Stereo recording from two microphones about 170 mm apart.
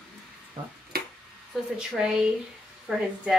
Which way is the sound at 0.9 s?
65° right (ahead or behind).